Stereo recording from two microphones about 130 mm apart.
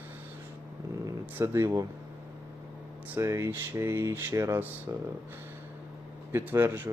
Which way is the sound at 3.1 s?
20° right (ahead or behind).